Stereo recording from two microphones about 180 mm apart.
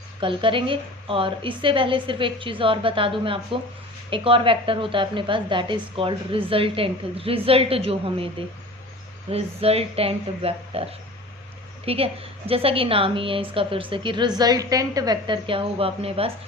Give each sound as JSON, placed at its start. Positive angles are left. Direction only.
{"t": 0.2, "sound": "a woman's voice", "side_deg": -30}
{"t": 11.9, "sound": "a woman's voice", "side_deg": -30}